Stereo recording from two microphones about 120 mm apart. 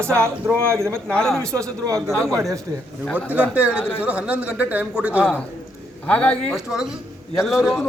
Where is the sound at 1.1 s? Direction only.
5° left (ahead or behind).